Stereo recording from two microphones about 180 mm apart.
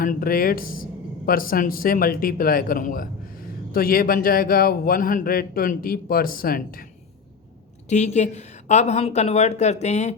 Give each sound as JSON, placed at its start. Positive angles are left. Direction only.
{"t": 0.0, "sound": "a man's voice", "side_deg": 50}
{"t": 7.9, "sound": "a woman's voice", "side_deg": 40}